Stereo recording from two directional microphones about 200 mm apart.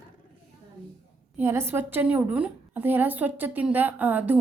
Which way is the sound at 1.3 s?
10° right (ahead or behind).